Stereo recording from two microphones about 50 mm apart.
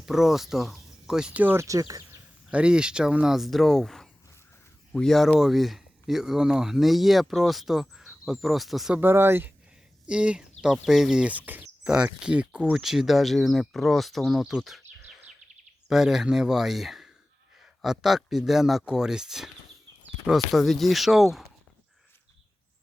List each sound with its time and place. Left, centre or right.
0.0 s speech: centre
1.3 s speech: right
1.5 s speech: right
2.5 s speech: right
3.2 s speech: centre
9.0 s speech: right
10.1 s speech: centre
11.2 s speech: right
11.8 s speech: centre
12.7 s speech: centre
15.9 s speech: centre